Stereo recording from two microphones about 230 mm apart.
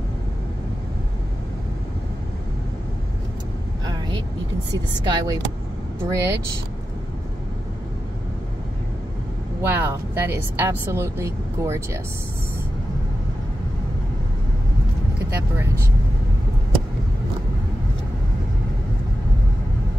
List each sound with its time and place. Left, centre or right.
3.8 s vehicle: centre
5.0 s speech: centre
9.6 s speech: centre